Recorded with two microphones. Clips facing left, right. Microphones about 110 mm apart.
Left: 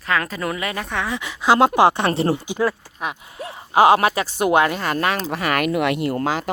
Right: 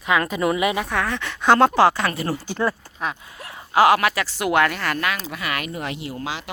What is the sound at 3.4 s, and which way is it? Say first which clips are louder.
Speech: left 2 dB; 25° left (ahead or behind).